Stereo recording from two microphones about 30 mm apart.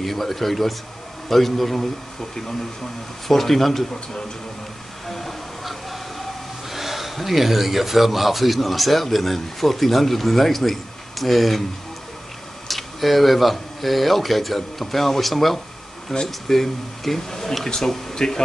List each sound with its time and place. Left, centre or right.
0.0 s speech: centre
3.3 s speech: centre
5.0 s train: centre
6.7 s speech: centre
12.6 s speech: centre; by 18.4 s left